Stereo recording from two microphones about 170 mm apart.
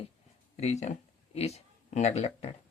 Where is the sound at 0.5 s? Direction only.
40° left (ahead or behind).